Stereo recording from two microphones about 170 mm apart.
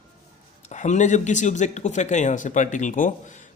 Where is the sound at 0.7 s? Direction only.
45° left (ahead or behind).